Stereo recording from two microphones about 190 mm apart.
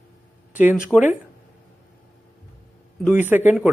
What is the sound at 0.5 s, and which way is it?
Speech, 10° right (ahead or behind).